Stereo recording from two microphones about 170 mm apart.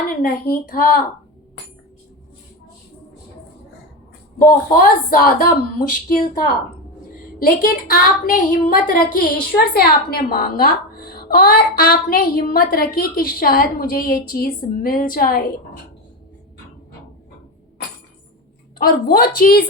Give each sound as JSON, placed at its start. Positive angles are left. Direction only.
{"t": 0.2, "sound": "a woman's voice", "side_deg": 60}
{"t": 4.4, "sound": "a woman's voice", "side_deg": 55}
{"t": 18.8, "sound": "a woman's voice", "side_deg": 60}